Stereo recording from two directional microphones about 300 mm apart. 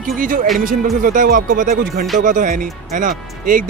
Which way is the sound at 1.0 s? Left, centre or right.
Right.